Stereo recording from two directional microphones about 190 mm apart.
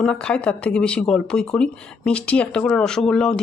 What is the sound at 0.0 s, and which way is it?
Speech, 5° left (ahead or behind).